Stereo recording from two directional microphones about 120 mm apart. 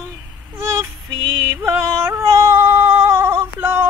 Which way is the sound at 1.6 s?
20° right (ahead or behind).